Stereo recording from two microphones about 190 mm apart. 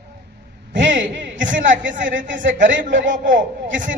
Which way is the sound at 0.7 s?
75° right (ahead or behind).